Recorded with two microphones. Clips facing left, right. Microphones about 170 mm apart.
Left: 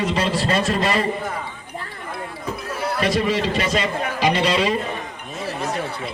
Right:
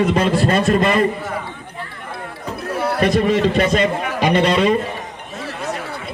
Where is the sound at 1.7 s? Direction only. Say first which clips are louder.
Left 1 dB; 40° left (ahead or behind).